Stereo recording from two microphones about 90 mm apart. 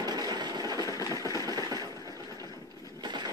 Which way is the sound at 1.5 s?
40° right (ahead or behind).